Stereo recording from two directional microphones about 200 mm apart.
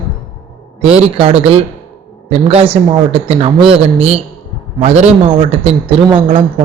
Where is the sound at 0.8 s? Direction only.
30° right (ahead or behind).